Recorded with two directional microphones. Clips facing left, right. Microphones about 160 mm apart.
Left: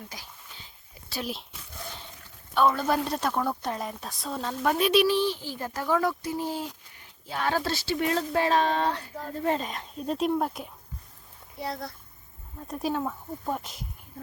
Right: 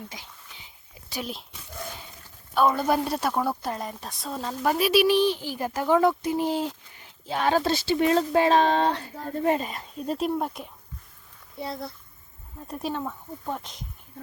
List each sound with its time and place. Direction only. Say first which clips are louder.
0.1 s a sound: right 1 dB; 20° right (ahead or behind)
1.2 s a woman's voice: left 1 dB; centre (ahead or behind)
2.6 s a woman's voice: right 2 dB; 10° right (ahead or behind)
5.0 s speech: right 4 dB; 15° right (ahead or behind)
6.5 s speech: right 6 dB; 90° right
7.3 s speech: right 5 dB; 20° right (ahead or behind)
9.4 s speech: right 3 dB; 15° right (ahead or behind)
9.6 s a woman's voice: right 1 dB; centre (ahead or behind)
11.6 s speech: right 1 dB; 25° right (ahead or behind)
12.6 s speech: left 2 dB; centre (ahead or behind)